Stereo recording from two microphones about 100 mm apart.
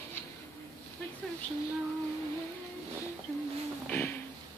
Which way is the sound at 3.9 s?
20° left (ahead or behind).